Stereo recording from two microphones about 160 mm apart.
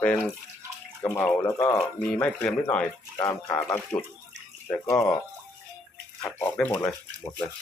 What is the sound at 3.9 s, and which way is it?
Speech, 15° left (ahead or behind).